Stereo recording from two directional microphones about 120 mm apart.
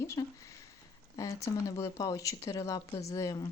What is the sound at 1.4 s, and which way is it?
Speech, 30° left (ahead or behind).